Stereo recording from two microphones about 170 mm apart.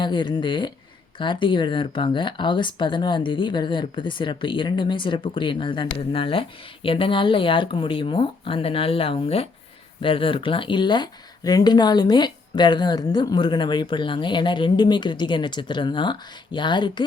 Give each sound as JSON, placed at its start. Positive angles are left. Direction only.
{"t": 0.0, "sound": "speech", "side_deg": 25}